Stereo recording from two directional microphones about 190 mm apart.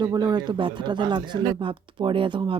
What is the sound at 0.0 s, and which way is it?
Speech, 20° right (ahead or behind).